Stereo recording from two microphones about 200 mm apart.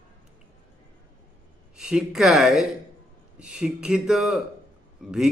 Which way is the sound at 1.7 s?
5° right (ahead or behind).